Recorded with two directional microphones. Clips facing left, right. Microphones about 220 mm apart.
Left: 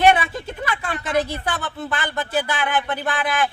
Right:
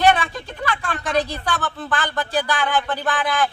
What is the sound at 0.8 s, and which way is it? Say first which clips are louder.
Speech: left 1 dB; 20° left (ahead or behind).